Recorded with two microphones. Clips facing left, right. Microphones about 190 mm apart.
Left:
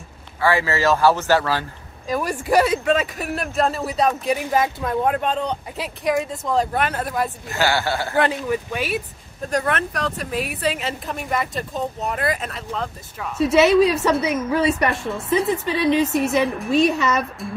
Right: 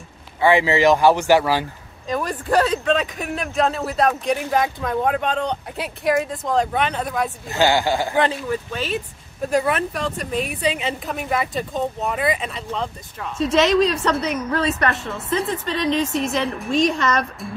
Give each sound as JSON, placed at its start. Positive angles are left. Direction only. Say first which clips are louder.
{"t": 0.4, "sound": "speech", "louder": "right 4 dB", "side_deg": -20}
{"t": 2.0, "sound": "speech", "louder": "left 1 dB", "side_deg": 10}
{"t": 7.4, "sound": "speech", "louder": "right 6 dB", "side_deg": -20}
{"t": 8.2, "sound": "a woman's voice", "louder": "even", "side_deg": 15}
{"t": 9.5, "sound": "a woman's voice", "louder": "right 2 dB", "side_deg": -5}